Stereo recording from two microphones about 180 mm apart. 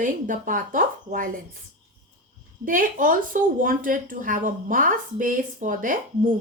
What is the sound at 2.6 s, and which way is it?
Speech, 50° right (ahead or behind).